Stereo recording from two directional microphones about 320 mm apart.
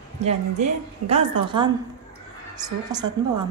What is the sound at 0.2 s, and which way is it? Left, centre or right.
A woman's voice, centre.